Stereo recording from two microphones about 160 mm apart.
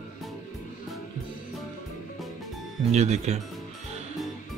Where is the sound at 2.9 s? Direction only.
45° right (ahead or behind).